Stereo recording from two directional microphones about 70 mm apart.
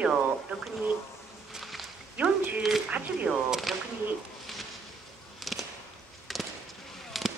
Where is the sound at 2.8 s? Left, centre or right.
Centre.